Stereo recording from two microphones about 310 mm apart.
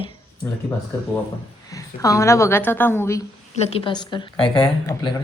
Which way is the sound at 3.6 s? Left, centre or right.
Centre.